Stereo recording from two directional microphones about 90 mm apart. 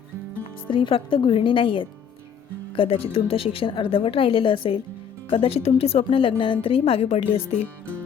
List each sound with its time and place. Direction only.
0.7 s speech: 80° left
2.7 s a woman's voice: 85° left
5.3 s a woman's voice: 90° left